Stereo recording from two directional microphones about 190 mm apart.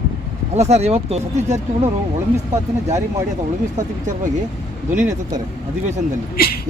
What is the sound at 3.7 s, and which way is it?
Speech, 40° right (ahead or behind).